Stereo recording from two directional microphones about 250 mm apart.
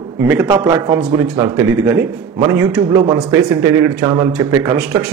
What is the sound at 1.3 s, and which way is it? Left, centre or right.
A man's voice, centre.